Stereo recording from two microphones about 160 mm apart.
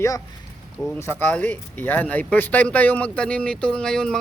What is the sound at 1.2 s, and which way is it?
Speech, 10° left (ahead or behind).